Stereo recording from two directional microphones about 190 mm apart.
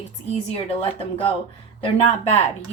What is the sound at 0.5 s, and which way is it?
A woman's voice, 30° left (ahead or behind).